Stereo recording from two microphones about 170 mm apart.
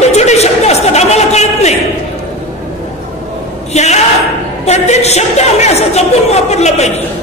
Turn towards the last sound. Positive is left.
turn(degrees=40)  # may be behind; listen again after turning